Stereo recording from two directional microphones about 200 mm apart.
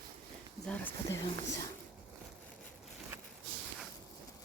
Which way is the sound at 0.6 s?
10° left (ahead or behind).